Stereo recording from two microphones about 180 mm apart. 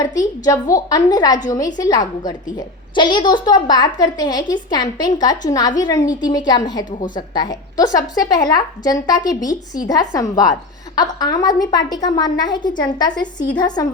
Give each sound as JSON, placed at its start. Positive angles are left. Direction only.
{"t": 0.0, "sound": "a woman's voice", "side_deg": 20}